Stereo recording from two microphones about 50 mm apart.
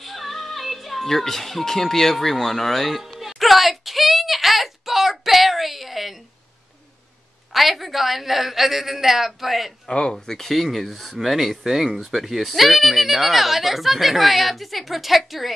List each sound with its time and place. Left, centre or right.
0.0 s music: centre
7.5 s speech: centre
9.8 s speech: centre
10.1 s speech: centre